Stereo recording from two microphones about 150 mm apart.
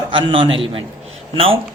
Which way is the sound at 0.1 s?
35° right (ahead or behind).